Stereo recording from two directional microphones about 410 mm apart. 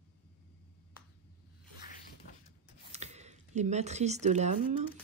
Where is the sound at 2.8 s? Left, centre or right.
Centre.